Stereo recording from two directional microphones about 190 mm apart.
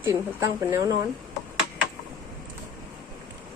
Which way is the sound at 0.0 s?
15° right (ahead or behind).